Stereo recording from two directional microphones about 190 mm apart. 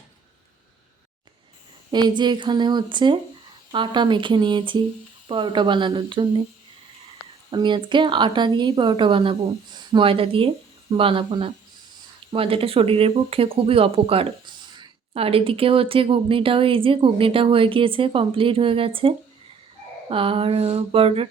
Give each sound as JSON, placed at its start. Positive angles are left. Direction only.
{"t": 1.9, "sound": "speech", "side_deg": -25}
{"t": 7.5, "sound": "speech", "side_deg": -25}